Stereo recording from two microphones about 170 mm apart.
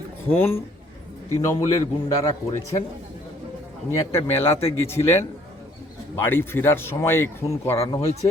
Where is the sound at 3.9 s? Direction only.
15° left (ahead or behind).